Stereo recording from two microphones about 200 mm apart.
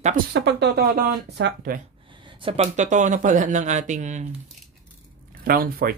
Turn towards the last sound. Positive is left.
turn(degrees=-45)  # may be behind; listen again after turning